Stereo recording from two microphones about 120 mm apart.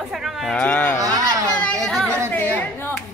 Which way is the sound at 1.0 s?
30° right (ahead or behind).